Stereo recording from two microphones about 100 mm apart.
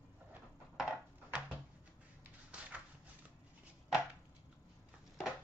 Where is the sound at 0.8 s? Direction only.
10° right (ahead or behind).